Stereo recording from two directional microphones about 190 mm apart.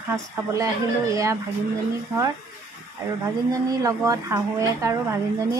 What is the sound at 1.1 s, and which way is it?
Speech, 15° right (ahead or behind).